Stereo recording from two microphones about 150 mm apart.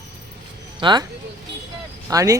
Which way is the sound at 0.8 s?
30° right (ahead or behind).